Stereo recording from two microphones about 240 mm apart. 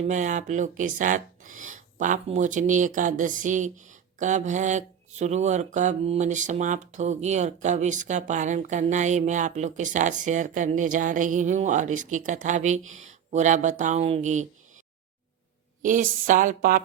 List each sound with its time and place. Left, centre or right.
0.1 s speech: right
15.8 s speech: right